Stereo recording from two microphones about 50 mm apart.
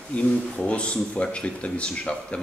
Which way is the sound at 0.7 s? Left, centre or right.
Left.